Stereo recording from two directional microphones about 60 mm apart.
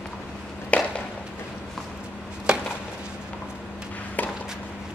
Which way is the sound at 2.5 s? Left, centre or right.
Centre.